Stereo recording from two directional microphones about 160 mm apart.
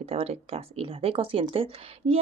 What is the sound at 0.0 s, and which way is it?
Speech, 40° right (ahead or behind).